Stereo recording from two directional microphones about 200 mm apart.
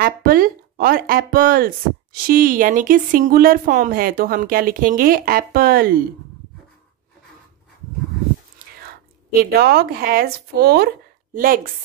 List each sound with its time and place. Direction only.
0.0 s speech: 45° right (ahead or behind)
9.4 s speech: 50° right (ahead or behind)